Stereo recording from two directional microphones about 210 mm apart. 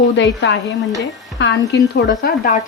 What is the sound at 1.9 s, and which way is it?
Speech, 45° left (ahead or behind).